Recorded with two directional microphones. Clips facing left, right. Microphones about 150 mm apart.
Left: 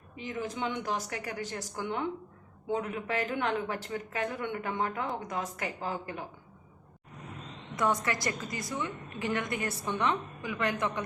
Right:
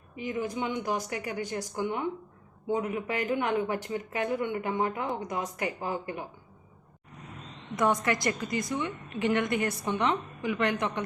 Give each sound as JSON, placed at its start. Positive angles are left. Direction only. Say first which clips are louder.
{"t": 0.2, "sound": "speech", "louder": "right 3 dB", "side_deg": -10}
{"t": 7.8, "sound": "a woman's voice", "louder": "right 3 dB", "side_deg": -20}